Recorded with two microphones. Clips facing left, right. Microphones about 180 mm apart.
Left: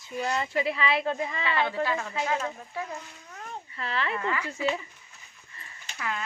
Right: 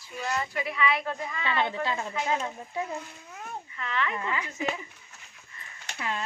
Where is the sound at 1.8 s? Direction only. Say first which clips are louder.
Left 1 dB; 20° right (ahead or behind).